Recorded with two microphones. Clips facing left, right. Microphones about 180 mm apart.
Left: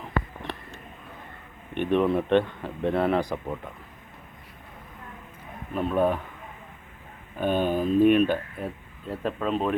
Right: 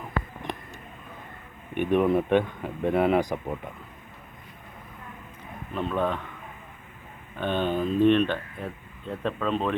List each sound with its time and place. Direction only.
0.4 s a sound: 15° right (ahead or behind)
1.7 s speech: 10° right (ahead or behind)
5.9 s speech: 10° left (ahead or behind)
7.3 s speech: 10° left (ahead or behind)